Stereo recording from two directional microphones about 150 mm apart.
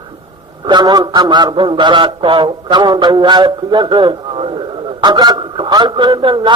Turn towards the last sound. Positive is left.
turn(degrees=-30)  # may be behind; listen again after turning